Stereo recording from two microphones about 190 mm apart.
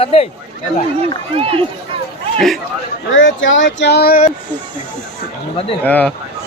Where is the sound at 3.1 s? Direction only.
80° left; by 4.2 s 55° left (ahead or behind).